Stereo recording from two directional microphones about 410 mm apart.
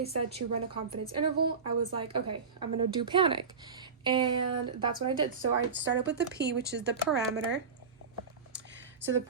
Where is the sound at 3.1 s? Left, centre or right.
Centre.